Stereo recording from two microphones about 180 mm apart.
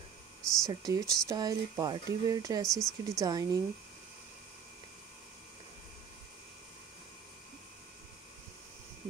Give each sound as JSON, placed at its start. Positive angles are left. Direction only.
{"t": 0.4, "sound": "a sound", "side_deg": 5}
{"t": 0.7, "sound": "speech", "side_deg": -20}
{"t": 2.6, "sound": "speech", "side_deg": 0}
{"t": 3.2, "sound": "speech", "side_deg": -20}